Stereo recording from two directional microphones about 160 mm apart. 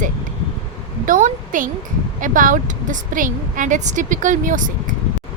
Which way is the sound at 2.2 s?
55° right (ahead or behind).